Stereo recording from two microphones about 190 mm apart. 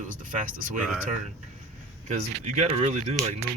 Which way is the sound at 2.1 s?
40° right (ahead or behind).